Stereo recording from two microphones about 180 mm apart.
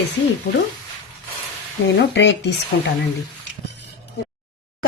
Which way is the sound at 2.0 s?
80° left.